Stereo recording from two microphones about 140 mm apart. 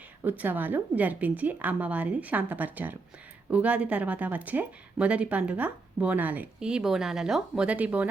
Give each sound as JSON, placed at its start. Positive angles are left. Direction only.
{"t": 0.3, "sound": "speech", "side_deg": -15}